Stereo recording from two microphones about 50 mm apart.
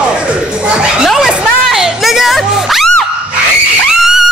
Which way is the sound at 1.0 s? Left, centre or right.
Centre.